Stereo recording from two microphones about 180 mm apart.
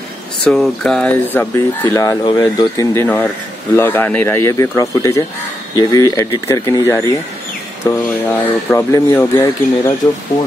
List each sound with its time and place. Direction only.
0.4 s speech: 5° left (ahead or behind)